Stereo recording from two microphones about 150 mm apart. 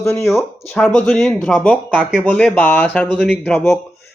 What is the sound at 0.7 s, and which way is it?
Speech, centre (ahead or behind).